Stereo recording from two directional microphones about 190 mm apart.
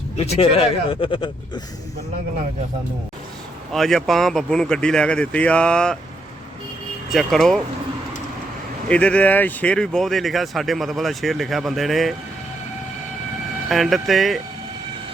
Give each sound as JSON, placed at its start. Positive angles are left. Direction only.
{"t": 0.2, "sound": "a man's voice", "side_deg": 30}
{"t": 3.7, "sound": "speech", "side_deg": 0}
{"t": 7.1, "sound": "speech", "side_deg": 0}
{"t": 8.9, "sound": "speech", "side_deg": 5}
{"t": 13.7, "sound": "speech", "side_deg": 0}